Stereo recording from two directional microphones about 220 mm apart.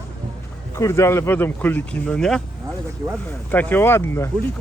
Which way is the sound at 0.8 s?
15° left (ahead or behind).